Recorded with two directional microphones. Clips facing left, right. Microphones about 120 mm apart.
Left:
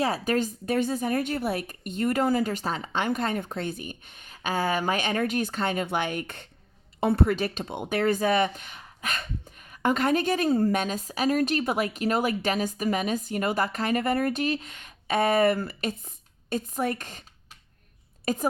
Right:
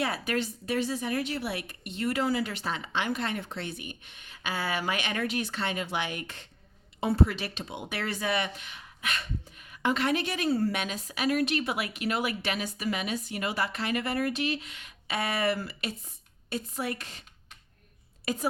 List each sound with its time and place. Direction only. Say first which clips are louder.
0.0 s speech: left 5 dB; 40° left (ahead or behind)
18.3 s speech: left 4 dB; 45° left (ahead or behind)